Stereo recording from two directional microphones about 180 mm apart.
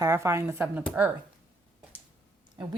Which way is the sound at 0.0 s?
15° right (ahead or behind).